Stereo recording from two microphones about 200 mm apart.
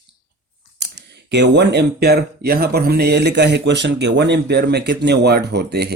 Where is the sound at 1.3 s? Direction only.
60° right (ahead or behind).